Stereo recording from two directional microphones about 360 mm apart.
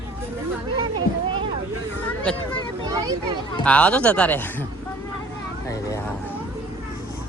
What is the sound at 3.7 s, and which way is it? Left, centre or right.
Speech, centre.